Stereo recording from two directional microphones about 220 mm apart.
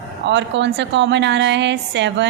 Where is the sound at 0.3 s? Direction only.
55° right (ahead or behind).